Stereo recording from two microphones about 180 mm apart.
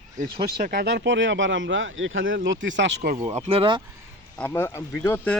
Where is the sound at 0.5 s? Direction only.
60° right (ahead or behind); by 3.1 s 80° right.